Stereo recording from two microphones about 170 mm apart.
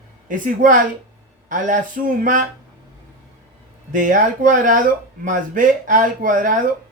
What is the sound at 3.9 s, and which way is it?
Speech, 50° right (ahead or behind).